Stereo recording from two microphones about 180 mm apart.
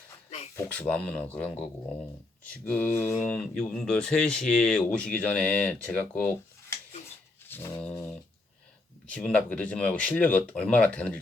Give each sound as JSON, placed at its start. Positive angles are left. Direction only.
{"t": 0.3, "sound": "speech", "side_deg": 35}
{"t": 0.5, "sound": "speech", "side_deg": 10}
{"t": 7.4, "sound": "dog", "side_deg": 10}
{"t": 9.0, "sound": "speech", "side_deg": 5}